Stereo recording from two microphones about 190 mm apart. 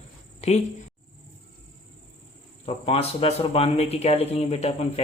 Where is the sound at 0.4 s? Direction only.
35° left (ahead or behind).